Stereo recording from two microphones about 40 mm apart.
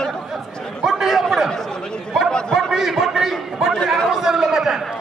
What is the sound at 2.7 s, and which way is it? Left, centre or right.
Speech, centre.